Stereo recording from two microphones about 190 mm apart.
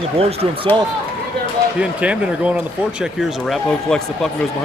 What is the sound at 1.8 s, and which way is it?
Speech, 5° right (ahead or behind).